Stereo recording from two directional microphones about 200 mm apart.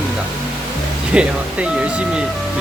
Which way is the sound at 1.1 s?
5° right (ahead or behind).